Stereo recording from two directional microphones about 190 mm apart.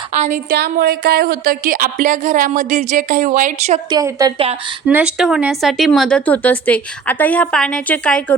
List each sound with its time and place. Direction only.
0.1 s speech: 40° right (ahead or behind)
0.5 s speech: 55° right (ahead or behind)
3.8 s a woman's voice: 20° right (ahead or behind)
4.9 s speech: 5° right (ahead or behind)